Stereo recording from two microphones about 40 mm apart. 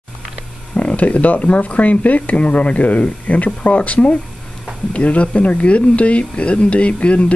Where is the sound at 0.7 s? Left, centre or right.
Left.